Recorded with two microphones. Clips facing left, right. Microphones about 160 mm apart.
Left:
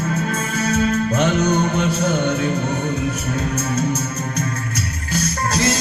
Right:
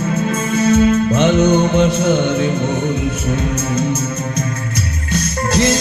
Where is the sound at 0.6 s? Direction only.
25° right (ahead or behind).